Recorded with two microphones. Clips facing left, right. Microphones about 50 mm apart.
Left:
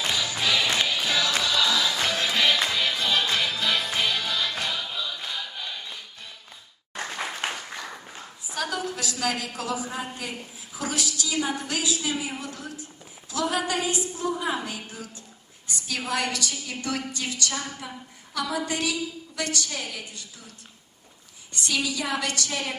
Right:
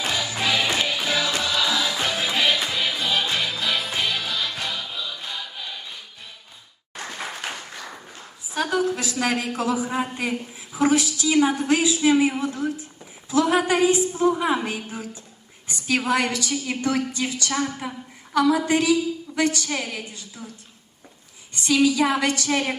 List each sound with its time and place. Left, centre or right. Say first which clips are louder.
0.1 s music: right 2 dB; right; by 5.8 s centre
8.5 s a sound: right 7 dB; right
9.3 s a woman's voice: right 6 dB; right
14.3 s a woman's voice: right 5 dB; right
21.8 s a woman's voice: right 9 dB; right